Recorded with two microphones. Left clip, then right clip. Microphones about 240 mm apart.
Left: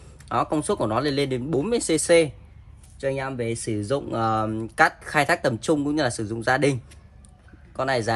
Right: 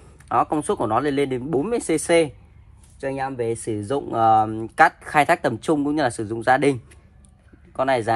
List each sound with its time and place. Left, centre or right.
0.2 s speech: centre